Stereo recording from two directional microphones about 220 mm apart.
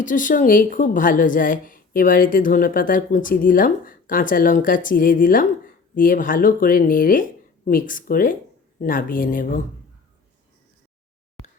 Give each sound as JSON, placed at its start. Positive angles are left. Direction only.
{"t": 0.0, "sound": "a woman's voice", "side_deg": 35}